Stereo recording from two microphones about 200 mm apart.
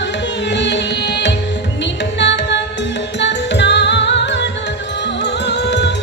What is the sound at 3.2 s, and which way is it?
Music, 60° left (ahead or behind).